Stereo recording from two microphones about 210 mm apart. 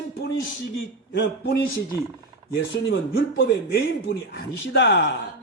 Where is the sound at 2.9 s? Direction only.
50° left (ahead or behind).